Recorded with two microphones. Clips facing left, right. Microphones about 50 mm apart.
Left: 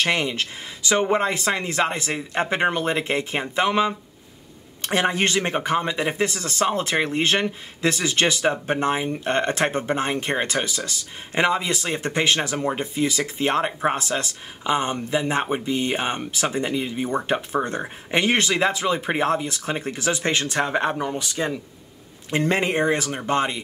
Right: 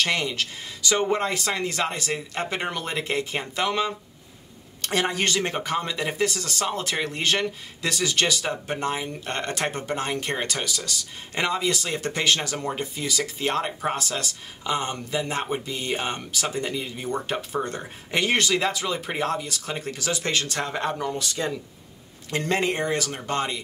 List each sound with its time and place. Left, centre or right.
0.0 s speech: left